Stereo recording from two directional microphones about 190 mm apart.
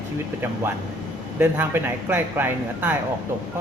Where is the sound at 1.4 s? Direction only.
10° right (ahead or behind).